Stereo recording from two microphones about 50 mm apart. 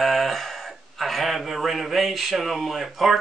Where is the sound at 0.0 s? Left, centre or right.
Centre.